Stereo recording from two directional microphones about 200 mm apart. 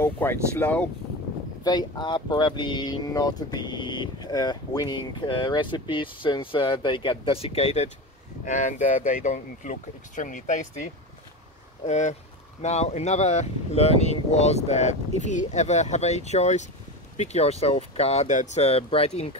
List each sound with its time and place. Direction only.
0.0 s speech: 10° left (ahead or behind)
1.6 s speech: 20° left (ahead or behind)